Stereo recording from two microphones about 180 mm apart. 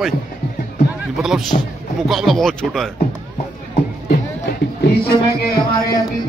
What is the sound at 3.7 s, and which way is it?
Music, 55° left (ahead or behind).